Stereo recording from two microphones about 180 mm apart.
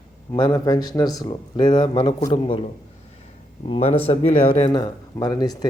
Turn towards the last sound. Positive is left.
turn(degrees=20)  # may be behind; listen again after turning